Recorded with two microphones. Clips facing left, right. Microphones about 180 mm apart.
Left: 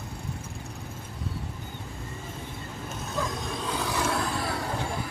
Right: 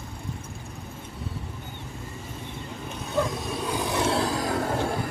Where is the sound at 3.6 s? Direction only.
15° right (ahead or behind); by 4.5 s 40° right (ahead or behind).